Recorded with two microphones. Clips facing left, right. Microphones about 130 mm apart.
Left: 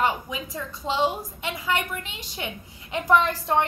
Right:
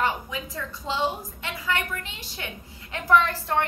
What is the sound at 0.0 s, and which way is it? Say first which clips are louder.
A woman's voice: left 2 dB; 15° left (ahead or behind).